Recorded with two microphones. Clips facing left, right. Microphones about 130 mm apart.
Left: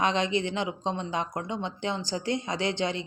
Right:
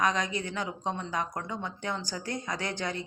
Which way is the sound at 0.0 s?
25° left (ahead or behind).